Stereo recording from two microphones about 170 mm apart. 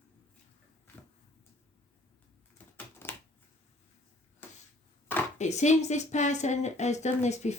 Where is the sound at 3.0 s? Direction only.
15° left (ahead or behind).